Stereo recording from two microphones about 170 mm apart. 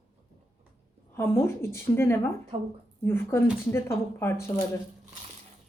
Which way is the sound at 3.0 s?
15° left (ahead or behind).